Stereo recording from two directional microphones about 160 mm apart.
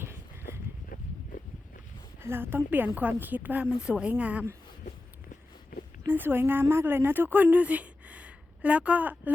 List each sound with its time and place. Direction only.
1.3 s a sound: 55° left (ahead or behind)
2.2 s a woman's voice: 15° right (ahead or behind)
6.1 s speech: 10° right (ahead or behind)